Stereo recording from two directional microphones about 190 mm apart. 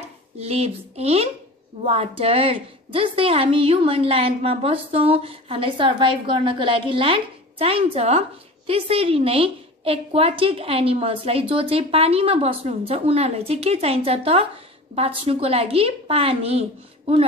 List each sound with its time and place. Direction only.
0.4 s a woman's voice: 35° right (ahead or behind)